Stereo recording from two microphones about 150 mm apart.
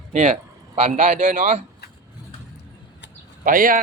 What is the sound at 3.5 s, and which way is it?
Speech, 65° right (ahead or behind).